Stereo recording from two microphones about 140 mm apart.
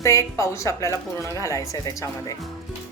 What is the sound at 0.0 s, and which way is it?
A woman's voice, 20° left (ahead or behind).